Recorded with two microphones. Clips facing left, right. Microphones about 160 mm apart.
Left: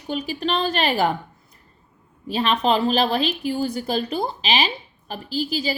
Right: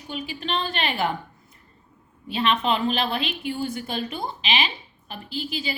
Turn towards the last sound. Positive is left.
turn(degrees=35)  # may be behind; listen again after turning